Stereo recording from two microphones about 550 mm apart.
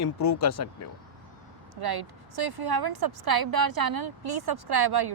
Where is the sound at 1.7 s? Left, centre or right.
Right.